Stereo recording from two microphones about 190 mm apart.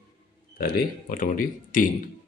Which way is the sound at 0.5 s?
50° left (ahead or behind).